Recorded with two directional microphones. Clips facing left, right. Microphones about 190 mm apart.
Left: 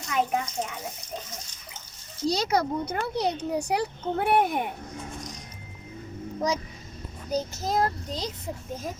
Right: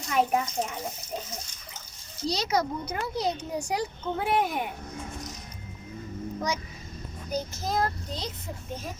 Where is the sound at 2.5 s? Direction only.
55° left (ahead or behind).